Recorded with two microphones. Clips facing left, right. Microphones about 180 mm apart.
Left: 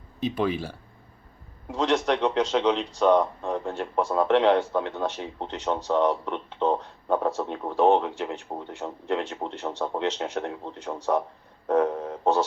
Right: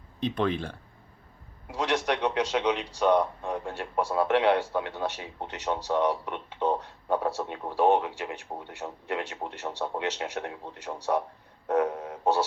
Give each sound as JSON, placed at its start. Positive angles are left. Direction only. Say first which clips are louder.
{"t": 0.2, "sound": "speech", "louder": "left 1 dB", "side_deg": 5}
{"t": 1.7, "sound": "a man's voice", "louder": "left 4 dB", "side_deg": -10}